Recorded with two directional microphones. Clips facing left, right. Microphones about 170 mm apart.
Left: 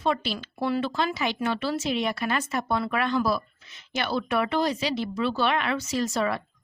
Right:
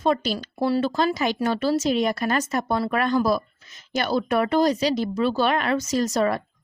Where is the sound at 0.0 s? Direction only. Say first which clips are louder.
Right 4 dB; 40° right (ahead or behind).